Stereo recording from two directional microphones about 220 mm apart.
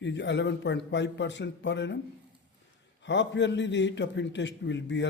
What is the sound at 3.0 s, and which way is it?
A man's voice, 55° left (ahead or behind).